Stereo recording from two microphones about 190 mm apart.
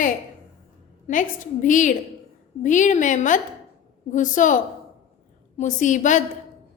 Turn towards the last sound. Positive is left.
turn(degrees=40)  # may be behind; listen again after turning